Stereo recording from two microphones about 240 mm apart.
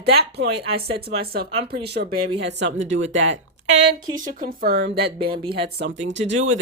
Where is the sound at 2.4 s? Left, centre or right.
Right.